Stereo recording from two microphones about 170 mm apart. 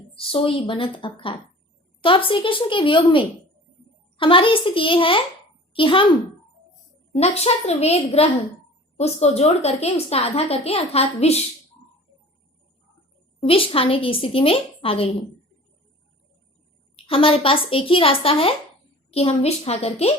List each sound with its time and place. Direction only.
0.1 s a woman's voice: 30° left (ahead or behind)
7.1 s a woman's voice: 35° left (ahead or behind)
13.5 s a woman's voice: 30° left (ahead or behind)
17.1 s a woman's voice: 30° left (ahead or behind)